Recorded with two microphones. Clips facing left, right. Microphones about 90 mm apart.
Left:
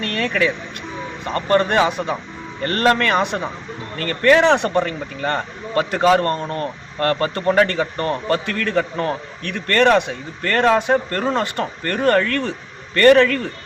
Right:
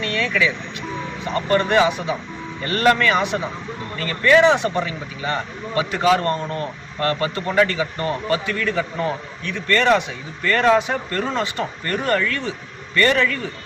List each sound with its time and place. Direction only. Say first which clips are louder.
0.0 s speech: left 1 dB; 50° left (ahead or behind)